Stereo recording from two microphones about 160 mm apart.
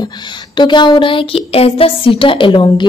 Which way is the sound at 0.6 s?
30° left (ahead or behind).